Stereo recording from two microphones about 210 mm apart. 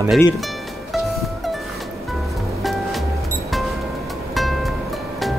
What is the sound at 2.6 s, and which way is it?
Music, centre (ahead or behind).